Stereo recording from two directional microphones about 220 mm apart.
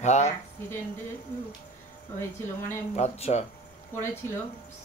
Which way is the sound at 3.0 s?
30° left (ahead or behind).